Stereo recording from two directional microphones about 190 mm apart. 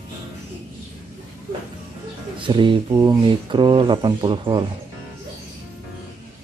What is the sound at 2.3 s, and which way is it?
Speech, 25° right (ahead or behind).